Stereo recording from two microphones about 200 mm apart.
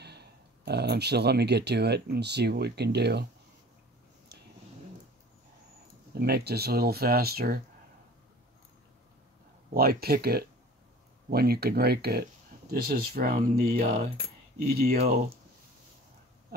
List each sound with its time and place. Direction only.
0.0 s speech: 55° right (ahead or behind)
6.1 s speech: 50° right (ahead or behind)
9.8 s speech: 50° right (ahead or behind)